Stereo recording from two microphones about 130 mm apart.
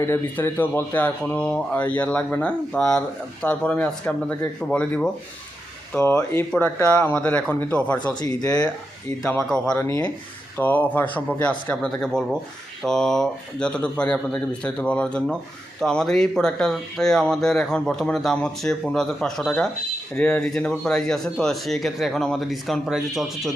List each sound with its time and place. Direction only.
0.0 s speech: 20° left (ahead or behind)
8.2 s speech: 30° left (ahead or behind)
9.2 s speech: 5° left (ahead or behind)